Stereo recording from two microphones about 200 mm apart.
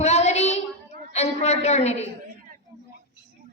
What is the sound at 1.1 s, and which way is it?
Speech, 35° left (ahead or behind).